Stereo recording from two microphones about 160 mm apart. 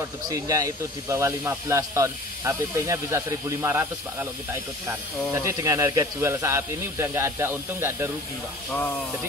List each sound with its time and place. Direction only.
0.3 s speech: 20° right (ahead or behind)
5.3 s speech: 20° right (ahead or behind)